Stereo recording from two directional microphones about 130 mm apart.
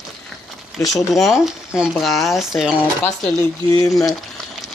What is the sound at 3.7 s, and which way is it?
Speech, 25° left (ahead or behind).